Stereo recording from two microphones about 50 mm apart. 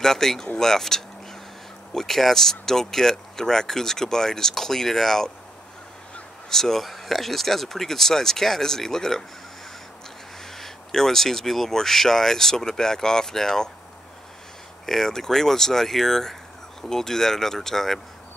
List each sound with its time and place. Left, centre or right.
0.0 s speech: centre
6.5 s speech: centre
10.4 s speech: centre
14.9 s speech: centre